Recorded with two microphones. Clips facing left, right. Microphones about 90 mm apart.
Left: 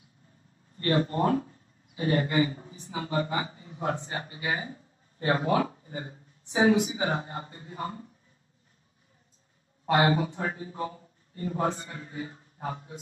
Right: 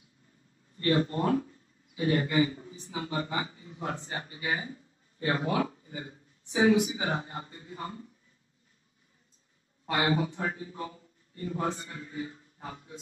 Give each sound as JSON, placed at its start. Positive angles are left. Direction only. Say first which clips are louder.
{"t": 0.7, "sound": "speech", "louder": "left 1 dB", "side_deg": 40}
{"t": 9.8, "sound": "speech", "louder": "left 4 dB", "side_deg": 40}